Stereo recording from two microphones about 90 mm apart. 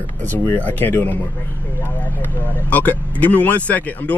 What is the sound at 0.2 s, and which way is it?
Speech, 20° left (ahead or behind).